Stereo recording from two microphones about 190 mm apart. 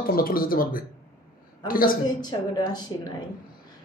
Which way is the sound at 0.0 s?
50° left (ahead or behind).